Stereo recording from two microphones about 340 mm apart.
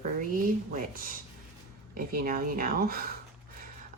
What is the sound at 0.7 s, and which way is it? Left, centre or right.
Speech, right.